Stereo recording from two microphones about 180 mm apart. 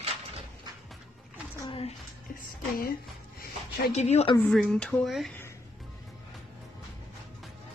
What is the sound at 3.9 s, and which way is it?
Speech, 35° left (ahead or behind).